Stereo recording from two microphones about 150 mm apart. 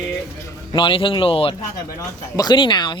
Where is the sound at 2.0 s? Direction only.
25° left (ahead or behind).